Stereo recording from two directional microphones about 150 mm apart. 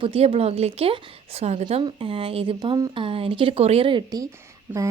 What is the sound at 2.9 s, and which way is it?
A woman's voice, 35° right (ahead or behind).